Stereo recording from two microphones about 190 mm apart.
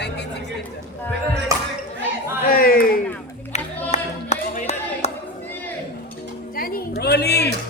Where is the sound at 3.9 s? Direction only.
35° left (ahead or behind).